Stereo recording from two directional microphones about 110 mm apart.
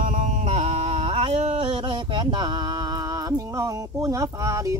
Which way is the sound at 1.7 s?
50° right (ahead or behind).